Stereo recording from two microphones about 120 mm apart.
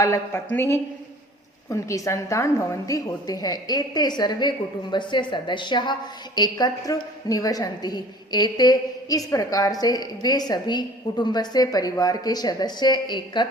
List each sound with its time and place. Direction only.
0.0 s a woman's voice: 20° left (ahead or behind); by 13.5 s 40° left (ahead or behind)